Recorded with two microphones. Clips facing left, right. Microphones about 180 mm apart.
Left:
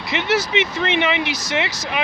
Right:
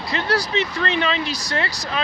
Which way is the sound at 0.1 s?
20° left (ahead or behind).